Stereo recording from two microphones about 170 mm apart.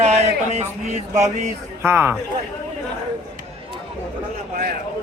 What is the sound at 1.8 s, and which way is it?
Speech, 15° right (ahead or behind).